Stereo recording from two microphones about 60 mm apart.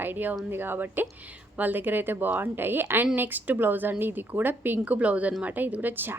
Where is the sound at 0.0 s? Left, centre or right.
Right.